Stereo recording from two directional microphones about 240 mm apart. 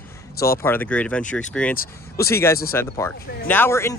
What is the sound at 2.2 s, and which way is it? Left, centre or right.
Speech, centre.